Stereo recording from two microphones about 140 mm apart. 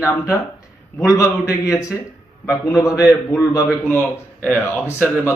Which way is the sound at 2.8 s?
25° left (ahead or behind).